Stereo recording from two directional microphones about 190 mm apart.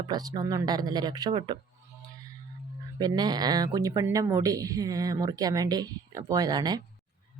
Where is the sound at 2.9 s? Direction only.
20° right (ahead or behind).